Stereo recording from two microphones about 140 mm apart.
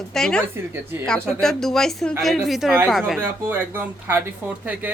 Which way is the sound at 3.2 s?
15° right (ahead or behind).